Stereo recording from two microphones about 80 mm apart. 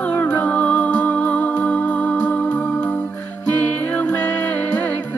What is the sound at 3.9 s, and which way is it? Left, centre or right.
Music, left.